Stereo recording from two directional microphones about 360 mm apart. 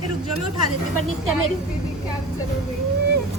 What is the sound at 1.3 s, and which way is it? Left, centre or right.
Speech, right.